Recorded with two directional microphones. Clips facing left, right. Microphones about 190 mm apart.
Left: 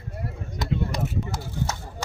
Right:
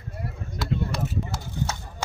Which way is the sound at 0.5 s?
15° left (ahead or behind).